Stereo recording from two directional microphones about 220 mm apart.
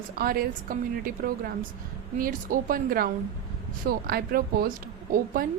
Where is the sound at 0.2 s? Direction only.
40° right (ahead or behind).